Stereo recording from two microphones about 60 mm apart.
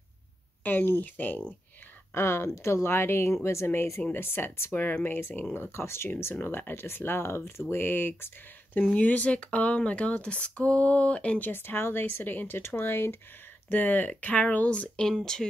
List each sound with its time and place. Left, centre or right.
0.7 s speech: left
2.1 s speech: left
8.9 s speech: left
11.4 s speech: left
13.7 s speech: left